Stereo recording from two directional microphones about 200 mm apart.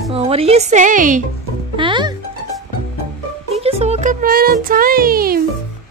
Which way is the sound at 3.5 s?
30° right (ahead or behind).